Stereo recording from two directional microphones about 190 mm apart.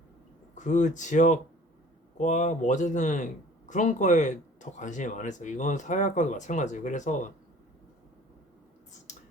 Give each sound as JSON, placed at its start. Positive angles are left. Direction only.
{"t": 0.5, "sound": "speech", "side_deg": 40}